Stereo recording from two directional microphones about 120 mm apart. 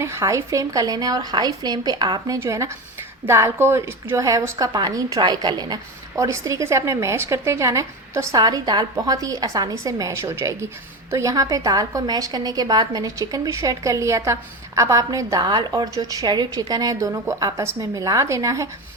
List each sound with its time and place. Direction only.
0.0 s speech: 25° right (ahead or behind)
2.4 s a woman's voice: 25° right (ahead or behind)